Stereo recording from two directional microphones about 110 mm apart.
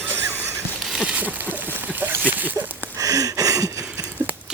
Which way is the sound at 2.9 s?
30° right (ahead or behind).